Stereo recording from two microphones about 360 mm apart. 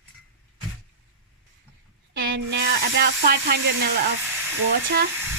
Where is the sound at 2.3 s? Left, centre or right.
Right.